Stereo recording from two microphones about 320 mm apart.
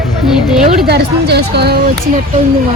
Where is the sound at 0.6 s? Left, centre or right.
Right.